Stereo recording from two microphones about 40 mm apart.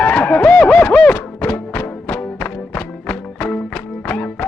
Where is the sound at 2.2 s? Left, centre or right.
Left.